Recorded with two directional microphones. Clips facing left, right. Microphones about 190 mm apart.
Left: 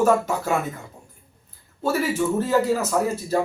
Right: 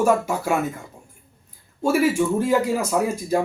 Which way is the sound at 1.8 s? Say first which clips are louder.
Right 3 dB; 10° right (ahead or behind).